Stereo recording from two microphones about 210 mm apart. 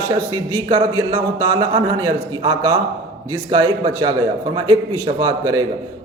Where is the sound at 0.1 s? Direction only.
20° right (ahead or behind).